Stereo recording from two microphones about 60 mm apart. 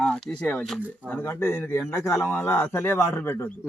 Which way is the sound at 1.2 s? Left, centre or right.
Left.